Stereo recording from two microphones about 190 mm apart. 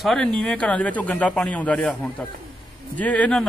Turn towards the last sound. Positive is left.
turn(degrees=5)  # may be behind; listen again after turning